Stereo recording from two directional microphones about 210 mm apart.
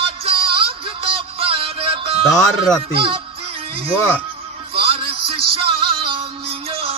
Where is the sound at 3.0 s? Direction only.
25° right (ahead or behind).